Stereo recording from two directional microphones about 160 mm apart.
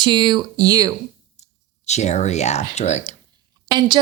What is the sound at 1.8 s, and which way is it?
Speech, 45° left (ahead or behind).